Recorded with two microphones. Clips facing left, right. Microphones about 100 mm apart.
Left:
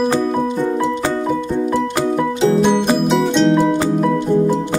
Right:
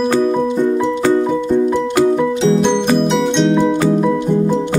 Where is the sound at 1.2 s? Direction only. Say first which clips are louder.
Right 4 dB; 5° left (ahead or behind).